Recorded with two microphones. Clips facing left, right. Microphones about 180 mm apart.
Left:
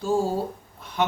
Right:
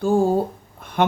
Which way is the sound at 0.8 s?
55° right (ahead or behind).